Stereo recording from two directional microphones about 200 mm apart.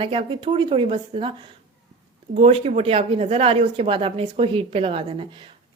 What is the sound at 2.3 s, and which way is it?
A woman's voice, 30° right (ahead or behind).